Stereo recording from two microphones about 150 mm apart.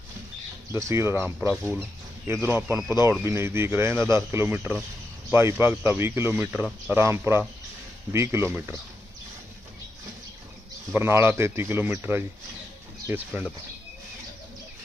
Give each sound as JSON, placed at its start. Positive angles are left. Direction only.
{"t": 0.7, "sound": "a man's voice", "side_deg": -20}
{"t": 10.9, "sound": "a man's voice", "side_deg": -15}